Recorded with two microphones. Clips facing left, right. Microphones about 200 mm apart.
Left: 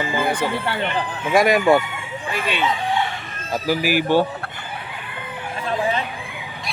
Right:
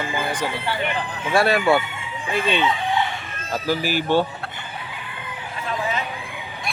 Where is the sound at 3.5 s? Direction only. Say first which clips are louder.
Left 3 dB; 10° left (ahead or behind).